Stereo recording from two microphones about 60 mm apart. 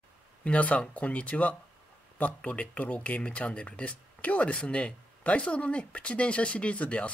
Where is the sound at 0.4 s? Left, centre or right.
Left.